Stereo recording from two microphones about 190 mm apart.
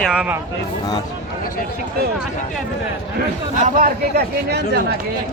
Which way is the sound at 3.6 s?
50° right (ahead or behind).